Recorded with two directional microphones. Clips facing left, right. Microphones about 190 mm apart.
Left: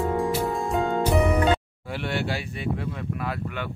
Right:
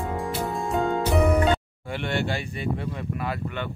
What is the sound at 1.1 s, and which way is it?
A man's voice, centre (ahead or behind).